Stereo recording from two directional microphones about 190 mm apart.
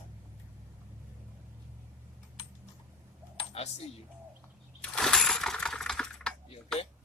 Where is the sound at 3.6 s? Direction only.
30° left (ahead or behind).